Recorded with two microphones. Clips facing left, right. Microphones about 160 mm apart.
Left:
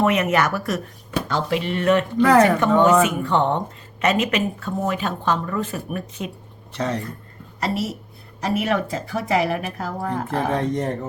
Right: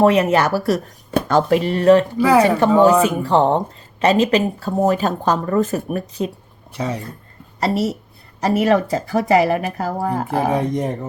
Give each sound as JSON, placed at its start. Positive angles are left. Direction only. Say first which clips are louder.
{"t": 0.0, "sound": "speech", "louder": "right 5 dB", "side_deg": -30}
{"t": 1.1, "sound": "speech", "louder": "right 7 dB", "side_deg": -45}
{"t": 2.1, "sound": "speech", "louder": "right 1 dB", "side_deg": -10}
{"t": 2.6, "sound": "speech", "louder": "right 3 dB", "side_deg": -35}
{"t": 6.7, "sound": "speech", "louder": "even", "side_deg": -10}
{"t": 7.6, "sound": "speech", "louder": "right 5 dB", "side_deg": -40}
{"t": 10.2, "sound": "speech", "louder": "right 2 dB", "side_deg": -10}